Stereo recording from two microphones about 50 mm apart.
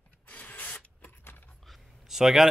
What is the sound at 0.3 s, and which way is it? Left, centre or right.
Rub, left.